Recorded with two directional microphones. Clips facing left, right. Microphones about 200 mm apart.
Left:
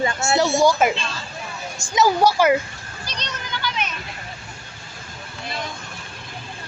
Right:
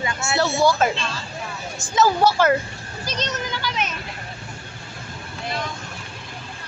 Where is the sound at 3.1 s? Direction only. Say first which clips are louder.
Right 7 dB; 45° right (ahead or behind).